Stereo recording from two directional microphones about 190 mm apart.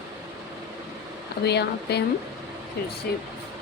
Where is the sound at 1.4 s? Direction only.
60° left (ahead or behind).